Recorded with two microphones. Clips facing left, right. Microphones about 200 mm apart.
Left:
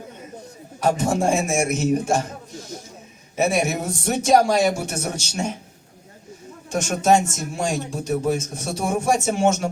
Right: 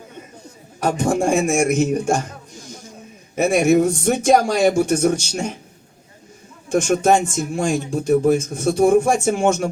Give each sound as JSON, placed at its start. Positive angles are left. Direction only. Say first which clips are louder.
{"t": 0.8, "sound": "speech", "louder": "right 2 dB", "side_deg": -50}
{"t": 3.3, "sound": "speech", "louder": "right 6 dB", "side_deg": -50}
{"t": 6.7, "sound": "speech", "louder": "right 3 dB", "side_deg": -50}